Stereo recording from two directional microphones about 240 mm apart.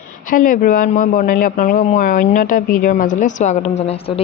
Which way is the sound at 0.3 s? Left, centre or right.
Left.